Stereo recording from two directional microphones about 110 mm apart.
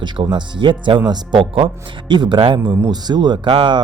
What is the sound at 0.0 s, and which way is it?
Speech, 45° right (ahead or behind).